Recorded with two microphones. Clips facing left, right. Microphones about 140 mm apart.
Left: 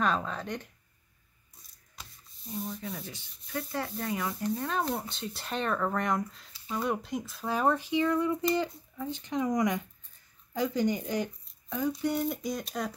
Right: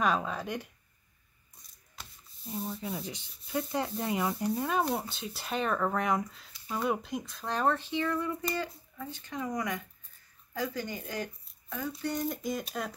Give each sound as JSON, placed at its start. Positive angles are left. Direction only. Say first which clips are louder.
{"t": 0.0, "sound": "speech", "louder": "even", "side_deg": -10}
{"t": 2.6, "sound": "speech", "louder": "right 2 dB", "side_deg": -5}
{"t": 3.0, "sound": "speech", "louder": "right 3 dB", "side_deg": -15}
{"t": 4.4, "sound": "speech", "louder": "right 1 dB", "side_deg": -10}
{"t": 12.0, "sound": "speech", "louder": "left 3 dB", "side_deg": 5}